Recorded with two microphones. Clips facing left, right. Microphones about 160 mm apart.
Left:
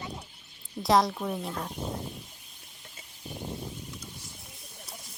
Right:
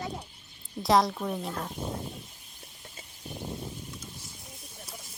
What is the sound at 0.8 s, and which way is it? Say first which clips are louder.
Speech: even; centre (ahead or behind).